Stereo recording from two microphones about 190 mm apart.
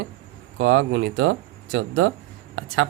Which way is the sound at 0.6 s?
80° right.